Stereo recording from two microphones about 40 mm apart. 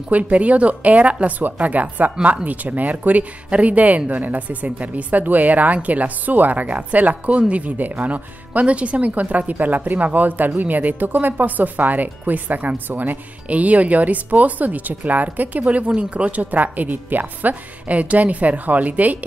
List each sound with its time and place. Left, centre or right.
0.1 s speech: right